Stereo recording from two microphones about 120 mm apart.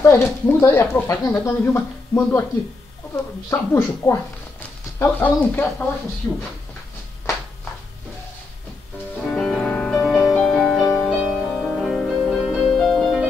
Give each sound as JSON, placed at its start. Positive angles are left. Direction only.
{"t": 0.0, "sound": "speech", "side_deg": 20}
{"t": 3.4, "sound": "speech", "side_deg": 25}
{"t": 9.3, "sound": "music", "side_deg": 5}